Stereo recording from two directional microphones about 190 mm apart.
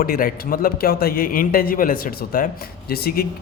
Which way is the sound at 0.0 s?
50° left (ahead or behind).